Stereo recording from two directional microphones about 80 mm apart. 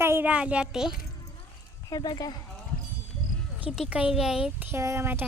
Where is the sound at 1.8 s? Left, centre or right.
Left.